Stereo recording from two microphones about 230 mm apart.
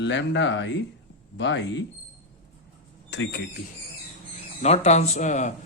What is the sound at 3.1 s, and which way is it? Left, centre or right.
Speech, left.